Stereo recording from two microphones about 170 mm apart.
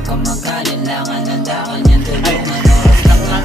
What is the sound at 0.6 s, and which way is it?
Music, centre (ahead or behind).